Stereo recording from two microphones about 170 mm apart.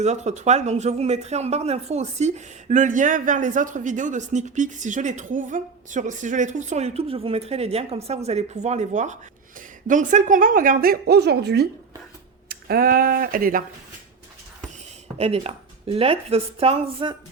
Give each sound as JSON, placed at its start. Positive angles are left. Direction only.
{"t": 0.0, "sound": "speech", "side_deg": -40}
{"t": 15.2, "sound": "speech", "side_deg": -35}